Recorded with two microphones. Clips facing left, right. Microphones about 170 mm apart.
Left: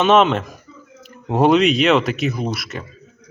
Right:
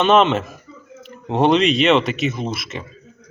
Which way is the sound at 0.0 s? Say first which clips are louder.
Even; centre (ahead or behind).